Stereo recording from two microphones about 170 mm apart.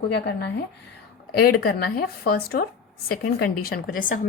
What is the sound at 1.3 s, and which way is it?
Speech, 65° left (ahead or behind).